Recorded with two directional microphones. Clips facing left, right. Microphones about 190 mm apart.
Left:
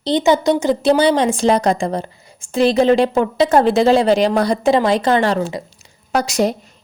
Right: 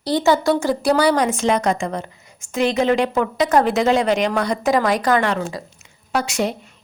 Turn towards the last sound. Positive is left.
turn(degrees=40)  # may be behind; listen again after turning